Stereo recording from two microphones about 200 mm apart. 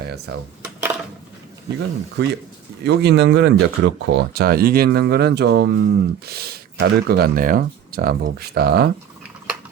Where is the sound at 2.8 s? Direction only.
60° right (ahead or behind).